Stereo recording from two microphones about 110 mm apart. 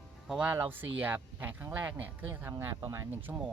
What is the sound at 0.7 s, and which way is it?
Speech, 15° right (ahead or behind).